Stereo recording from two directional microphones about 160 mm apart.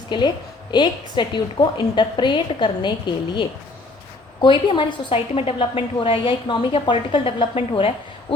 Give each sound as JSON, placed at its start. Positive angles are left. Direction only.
{"t": 0.1, "sound": "a woman's voice", "side_deg": 30}
{"t": 4.4, "sound": "a woman's voice", "side_deg": 30}